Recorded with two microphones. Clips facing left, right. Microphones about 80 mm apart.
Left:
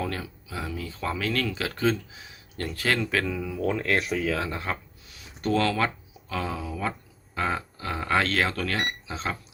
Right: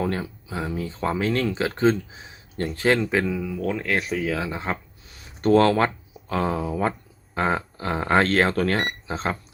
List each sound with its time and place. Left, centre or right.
0.0 s speech: right
3.2 s speech: centre
4.2 s speech: centre
4.5 s speech: right
5.4 s speech: right